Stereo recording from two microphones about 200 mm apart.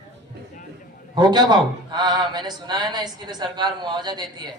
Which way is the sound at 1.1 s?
20° right (ahead or behind).